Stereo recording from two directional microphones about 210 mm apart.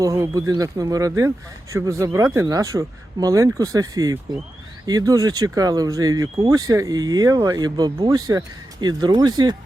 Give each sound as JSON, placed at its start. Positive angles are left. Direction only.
{"t": 0.0, "sound": "speech", "side_deg": -15}